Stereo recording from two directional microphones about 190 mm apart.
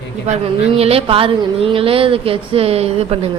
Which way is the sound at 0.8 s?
30° right (ahead or behind).